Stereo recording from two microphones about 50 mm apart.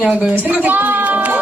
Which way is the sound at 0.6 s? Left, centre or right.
Right.